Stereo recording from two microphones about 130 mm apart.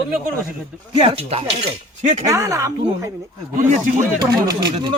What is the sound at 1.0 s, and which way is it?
Speech, 45° right (ahead or behind).